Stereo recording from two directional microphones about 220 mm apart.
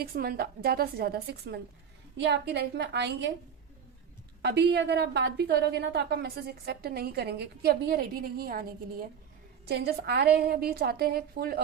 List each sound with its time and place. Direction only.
0.0 s a woman's voice: 45° right (ahead or behind)
4.4 s a woman's voice: 50° right (ahead or behind)
9.6 s a woman's voice: 45° right (ahead or behind)